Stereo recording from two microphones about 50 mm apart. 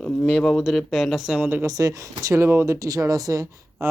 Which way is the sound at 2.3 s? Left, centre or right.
Right.